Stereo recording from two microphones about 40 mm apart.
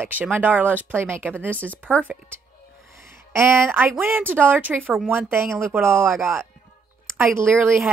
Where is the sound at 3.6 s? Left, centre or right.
Right.